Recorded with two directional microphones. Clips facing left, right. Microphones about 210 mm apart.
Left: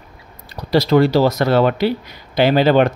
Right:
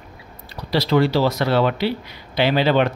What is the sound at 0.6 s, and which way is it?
Speech, 45° left (ahead or behind).